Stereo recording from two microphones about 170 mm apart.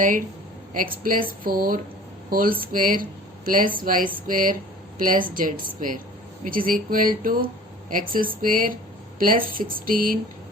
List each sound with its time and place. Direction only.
1.0 s speech: 55° right (ahead or behind)